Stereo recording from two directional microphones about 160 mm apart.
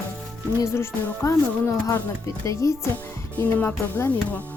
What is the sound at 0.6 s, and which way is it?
Speech, 15° left (ahead or behind).